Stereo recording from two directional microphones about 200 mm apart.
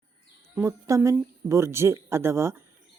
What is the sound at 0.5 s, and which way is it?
A woman's voice, 15° right (ahead or behind).